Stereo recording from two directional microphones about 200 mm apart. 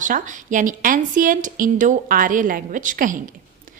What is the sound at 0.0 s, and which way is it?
A woman's voice, 40° right (ahead or behind).